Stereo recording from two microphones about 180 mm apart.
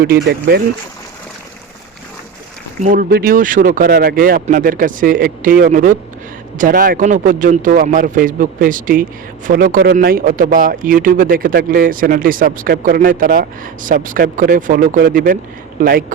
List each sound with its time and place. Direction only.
0.3 s speech: 65° right (ahead or behind)
2.8 s speech: 50° right (ahead or behind)